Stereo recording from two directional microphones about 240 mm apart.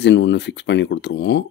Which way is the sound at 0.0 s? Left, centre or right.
Left.